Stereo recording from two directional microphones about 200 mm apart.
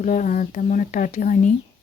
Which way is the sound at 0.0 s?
40° left (ahead or behind).